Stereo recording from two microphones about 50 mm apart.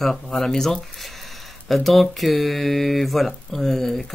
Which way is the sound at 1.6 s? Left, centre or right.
Centre.